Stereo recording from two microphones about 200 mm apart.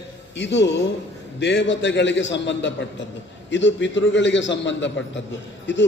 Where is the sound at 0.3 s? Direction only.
65° left (ahead or behind).